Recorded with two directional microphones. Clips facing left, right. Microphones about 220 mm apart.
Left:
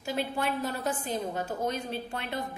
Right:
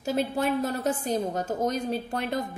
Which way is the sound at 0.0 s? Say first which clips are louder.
Right 5 dB; 40° right (ahead or behind).